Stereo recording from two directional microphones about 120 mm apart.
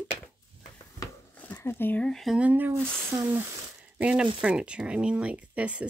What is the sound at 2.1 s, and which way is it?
Speech, centre (ahead or behind).